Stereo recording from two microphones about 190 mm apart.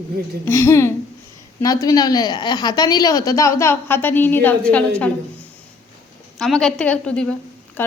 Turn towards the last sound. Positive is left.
turn(degrees=10)  # may be behind; listen again after turning